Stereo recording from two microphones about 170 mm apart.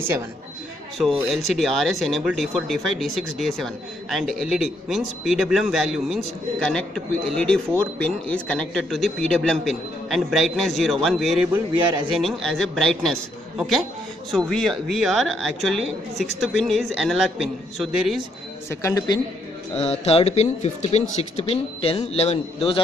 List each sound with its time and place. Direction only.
0.9 s speech: centre (ahead or behind)
7.3 s speech: 5° left (ahead or behind)
18.7 s speech: 15° left (ahead or behind)
19.8 s speech: 35° left (ahead or behind)